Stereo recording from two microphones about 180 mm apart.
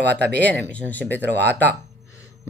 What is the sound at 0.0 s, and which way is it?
Speech, 65° right (ahead or behind).